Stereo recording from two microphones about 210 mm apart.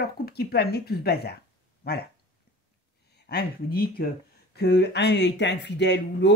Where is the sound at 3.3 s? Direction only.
50° left (ahead or behind).